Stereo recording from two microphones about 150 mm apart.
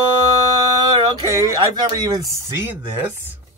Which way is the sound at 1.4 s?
25° right (ahead or behind).